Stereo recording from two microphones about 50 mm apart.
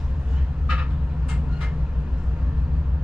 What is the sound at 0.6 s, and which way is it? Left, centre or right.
Vehicle, centre.